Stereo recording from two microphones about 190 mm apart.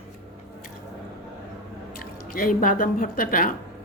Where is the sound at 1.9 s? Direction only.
50° left (ahead or behind).